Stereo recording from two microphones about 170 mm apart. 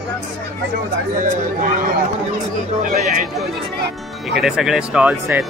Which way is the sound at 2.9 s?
50° right (ahead or behind).